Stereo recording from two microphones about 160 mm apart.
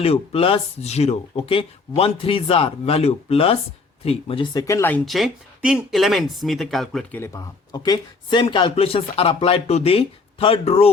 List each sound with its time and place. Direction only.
0.0 s speech: 35° left (ahead or behind)
4.5 s speech: 20° left (ahead or behind)
5.0 s speech: centre (ahead or behind)
7.2 s speech: 25° left (ahead or behind); by 10.9 s 40° left (ahead or behind)